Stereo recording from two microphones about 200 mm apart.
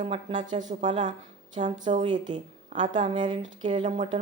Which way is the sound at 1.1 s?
40° right (ahead or behind).